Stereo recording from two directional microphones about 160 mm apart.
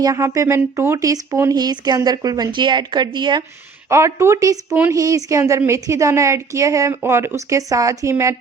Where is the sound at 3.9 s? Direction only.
15° right (ahead or behind).